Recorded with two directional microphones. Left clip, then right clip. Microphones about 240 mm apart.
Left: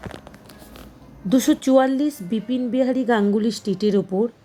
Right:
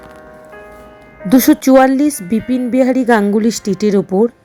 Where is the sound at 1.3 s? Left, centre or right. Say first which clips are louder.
Right 8 dB; right.